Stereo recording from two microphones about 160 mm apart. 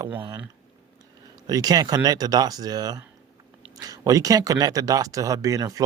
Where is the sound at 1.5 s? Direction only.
25° right (ahead or behind).